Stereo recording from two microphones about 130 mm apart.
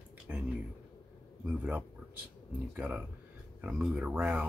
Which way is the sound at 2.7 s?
15° right (ahead or behind).